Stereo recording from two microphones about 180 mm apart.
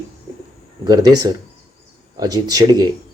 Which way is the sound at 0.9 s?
20° right (ahead or behind).